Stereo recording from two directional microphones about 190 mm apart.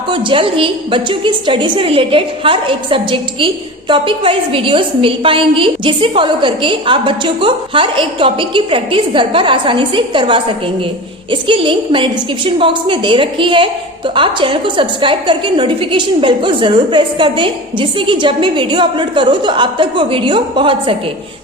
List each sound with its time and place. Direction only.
0.1 s a woman's voice: 25° right (ahead or behind)